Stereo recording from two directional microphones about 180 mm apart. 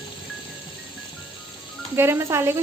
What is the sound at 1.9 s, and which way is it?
Speech, 15° right (ahead or behind).